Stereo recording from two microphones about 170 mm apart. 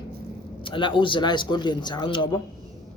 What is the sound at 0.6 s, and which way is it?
Speech, 30° left (ahead or behind).